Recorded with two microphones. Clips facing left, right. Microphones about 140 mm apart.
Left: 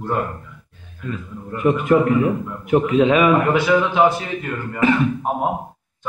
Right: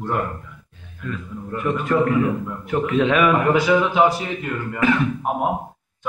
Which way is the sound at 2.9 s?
5° left (ahead or behind).